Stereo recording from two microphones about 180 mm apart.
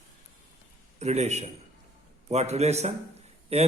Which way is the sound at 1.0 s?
40° right (ahead or behind).